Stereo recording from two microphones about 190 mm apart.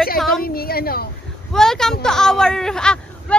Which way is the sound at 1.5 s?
5° left (ahead or behind).